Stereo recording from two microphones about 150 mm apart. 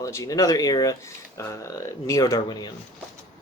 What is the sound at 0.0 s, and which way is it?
Speech, 20° left (ahead or behind).